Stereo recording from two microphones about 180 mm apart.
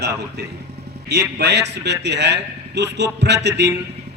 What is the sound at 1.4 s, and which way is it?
Speech, 70° right (ahead or behind).